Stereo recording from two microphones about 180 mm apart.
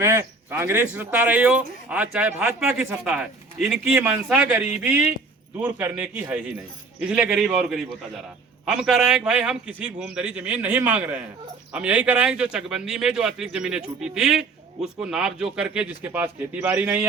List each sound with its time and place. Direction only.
0.0 s speech: 15° right (ahead or behind)